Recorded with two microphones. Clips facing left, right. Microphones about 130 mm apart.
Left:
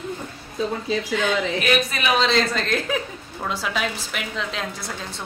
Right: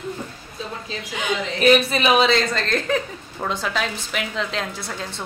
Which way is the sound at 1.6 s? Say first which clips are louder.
Right 6 dB; 25° right (ahead or behind).